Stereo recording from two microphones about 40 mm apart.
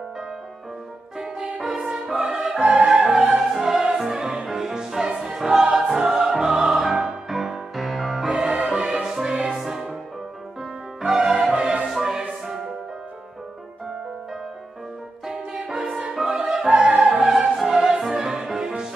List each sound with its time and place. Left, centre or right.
1.6 s music: centre
1.9 s music: centre
2.6 s opera: right
3.0 s opera: centre
3.5 s music: centre
5.3 s choir: centre
5.8 s music: centre
8.4 s music: right
11.0 s music: centre
15.7 s music: centre
16.3 s opera: centre
16.6 s opera: right
17.3 s opera: centre
17.7 s music: centre